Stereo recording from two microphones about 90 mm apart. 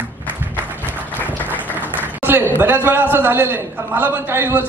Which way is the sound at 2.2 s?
20° right (ahead or behind).